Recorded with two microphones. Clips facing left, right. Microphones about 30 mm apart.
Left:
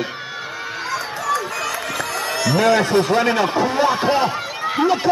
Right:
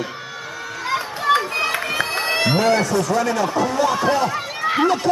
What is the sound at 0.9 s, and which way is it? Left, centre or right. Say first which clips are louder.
Run: right 4 dB; right.